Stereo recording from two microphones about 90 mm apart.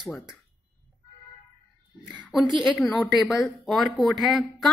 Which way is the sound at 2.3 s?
Centre (ahead or behind).